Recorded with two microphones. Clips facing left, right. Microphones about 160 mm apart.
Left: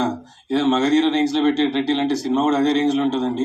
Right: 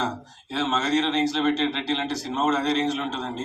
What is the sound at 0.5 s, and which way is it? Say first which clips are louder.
A man's voice: left 8 dB; 35° left (ahead or behind).